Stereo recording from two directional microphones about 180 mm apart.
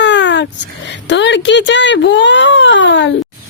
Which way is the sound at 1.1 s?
80° left.